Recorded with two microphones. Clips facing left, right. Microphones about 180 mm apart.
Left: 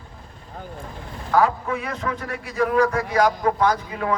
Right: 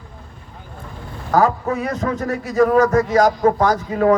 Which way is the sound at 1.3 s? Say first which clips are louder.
Right 3 dB; 40° right (ahead or behind).